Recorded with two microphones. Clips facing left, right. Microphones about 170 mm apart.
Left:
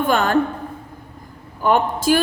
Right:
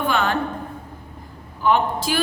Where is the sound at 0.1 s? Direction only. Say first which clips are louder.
Left 4 dB; 45° left (ahead or behind).